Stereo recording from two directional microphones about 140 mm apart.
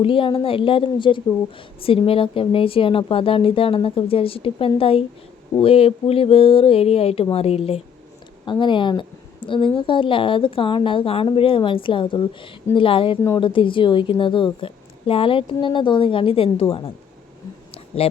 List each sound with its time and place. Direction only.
0.0 s a woman's voice: 40° left (ahead or behind)
8.4 s a woman's voice: 35° left (ahead or behind)
18.0 s speech: 45° left (ahead or behind)